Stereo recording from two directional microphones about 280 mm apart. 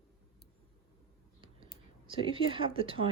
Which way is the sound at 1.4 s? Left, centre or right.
Centre.